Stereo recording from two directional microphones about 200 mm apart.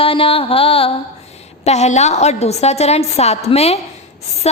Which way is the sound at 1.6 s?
35° left (ahead or behind).